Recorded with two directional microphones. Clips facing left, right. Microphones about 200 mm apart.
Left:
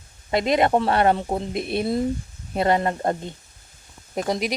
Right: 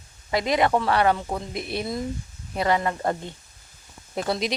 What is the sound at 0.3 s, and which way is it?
A woman's voice, 25° left (ahead or behind).